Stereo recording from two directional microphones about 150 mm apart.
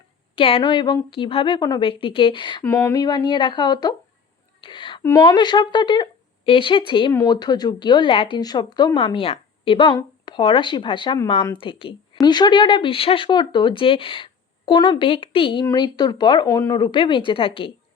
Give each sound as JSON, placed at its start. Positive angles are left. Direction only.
{"t": 0.3, "sound": "speech", "side_deg": 35}
{"t": 2.6, "sound": "speech", "side_deg": 20}
{"t": 4.6, "sound": "a sound", "side_deg": 30}
{"t": 5.0, "sound": "speech", "side_deg": 20}
{"t": 7.1, "sound": "speech", "side_deg": 25}
{"t": 9.1, "sound": "speech", "side_deg": 40}